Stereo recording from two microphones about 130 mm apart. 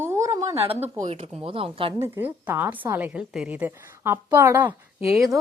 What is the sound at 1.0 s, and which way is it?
Speech, 55° right (ahead or behind).